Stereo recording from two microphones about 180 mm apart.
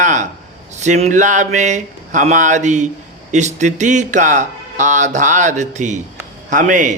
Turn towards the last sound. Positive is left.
turn(degrees=-45)  # may be behind; listen again after turning